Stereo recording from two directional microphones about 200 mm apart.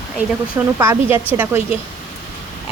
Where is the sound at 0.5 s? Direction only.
10° right (ahead or behind).